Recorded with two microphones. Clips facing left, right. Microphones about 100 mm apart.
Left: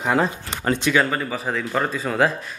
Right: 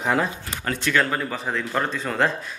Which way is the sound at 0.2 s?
25° left (ahead or behind).